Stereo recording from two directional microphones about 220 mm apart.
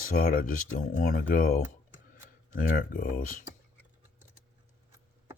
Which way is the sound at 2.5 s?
40° left (ahead or behind).